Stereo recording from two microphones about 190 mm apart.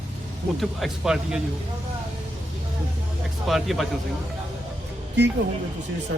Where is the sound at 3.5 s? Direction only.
Centre (ahead or behind).